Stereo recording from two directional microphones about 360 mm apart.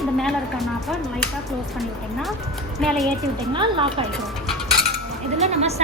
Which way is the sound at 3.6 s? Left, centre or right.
Centre.